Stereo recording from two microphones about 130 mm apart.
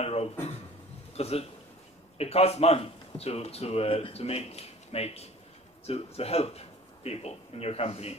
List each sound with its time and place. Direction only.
0.0 s a man's voice: 50° left (ahead or behind)